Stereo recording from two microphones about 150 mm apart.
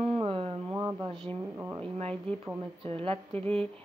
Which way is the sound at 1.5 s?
15° right (ahead or behind).